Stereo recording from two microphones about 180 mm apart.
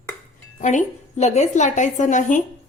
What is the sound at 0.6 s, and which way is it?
A woman's voice, 40° left (ahead or behind).